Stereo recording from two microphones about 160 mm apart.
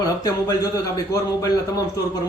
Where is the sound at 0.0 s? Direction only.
25° left (ahead or behind).